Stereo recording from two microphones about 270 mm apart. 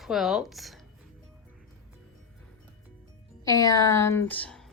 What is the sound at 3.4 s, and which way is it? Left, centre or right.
A woman's voice, centre.